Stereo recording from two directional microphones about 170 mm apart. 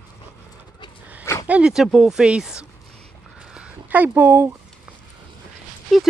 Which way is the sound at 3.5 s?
5° right (ahead or behind).